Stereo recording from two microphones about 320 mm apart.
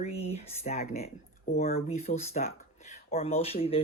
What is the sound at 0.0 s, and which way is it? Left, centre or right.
Speech, centre.